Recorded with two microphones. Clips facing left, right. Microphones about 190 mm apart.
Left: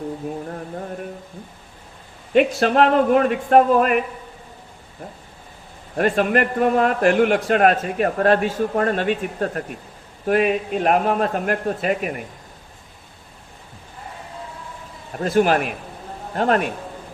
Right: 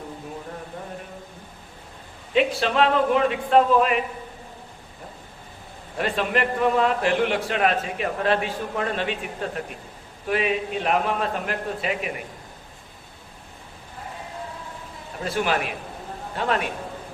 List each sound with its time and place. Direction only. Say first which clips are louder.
2.3 s a man's voice: left 5 dB; 50° left (ahead or behind)
6.0 s a man's voice: left 6 dB; 50° left (ahead or behind)
15.2 s a man's voice: left 7 dB; 45° left (ahead or behind)